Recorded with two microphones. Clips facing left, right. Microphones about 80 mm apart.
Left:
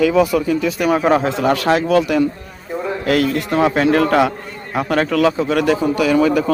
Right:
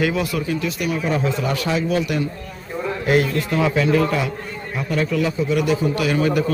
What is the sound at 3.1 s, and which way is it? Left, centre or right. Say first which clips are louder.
Speech: left 2 dB; left.